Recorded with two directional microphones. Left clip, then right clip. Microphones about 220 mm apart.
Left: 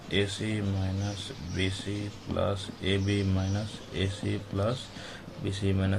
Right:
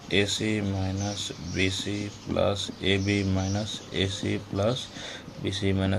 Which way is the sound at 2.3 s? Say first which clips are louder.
Right 5 dB; 30° right (ahead or behind).